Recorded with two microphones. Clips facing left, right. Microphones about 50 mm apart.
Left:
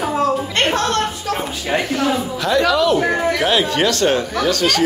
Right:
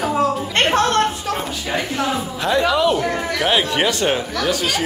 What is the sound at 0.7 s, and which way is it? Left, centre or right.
Speech, right.